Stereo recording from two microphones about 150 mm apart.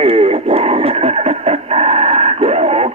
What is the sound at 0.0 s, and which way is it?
Radio, 40° right (ahead or behind).